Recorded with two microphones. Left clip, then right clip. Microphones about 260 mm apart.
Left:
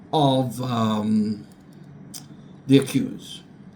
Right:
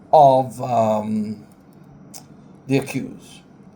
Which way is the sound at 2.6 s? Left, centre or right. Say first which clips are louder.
Left 3 dB; centre.